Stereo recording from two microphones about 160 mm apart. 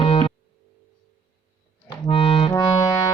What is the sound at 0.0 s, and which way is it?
Music, 35° left (ahead or behind).